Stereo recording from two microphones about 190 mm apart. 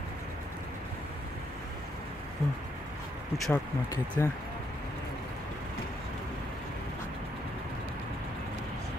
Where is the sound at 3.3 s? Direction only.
Centre (ahead or behind).